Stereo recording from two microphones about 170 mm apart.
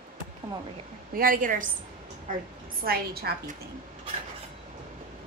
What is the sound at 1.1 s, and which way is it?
Speech, 55° right (ahead or behind).